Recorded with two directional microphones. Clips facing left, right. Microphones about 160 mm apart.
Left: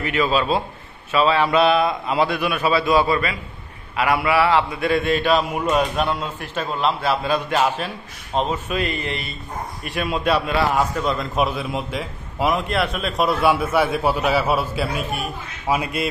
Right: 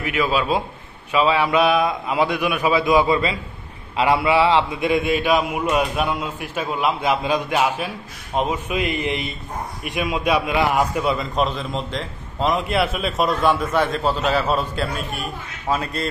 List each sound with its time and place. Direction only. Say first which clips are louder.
0.0 s a man's voice: left 1 dB; 10° right (ahead or behind)
11.3 s a man's voice: even; 10° left (ahead or behind)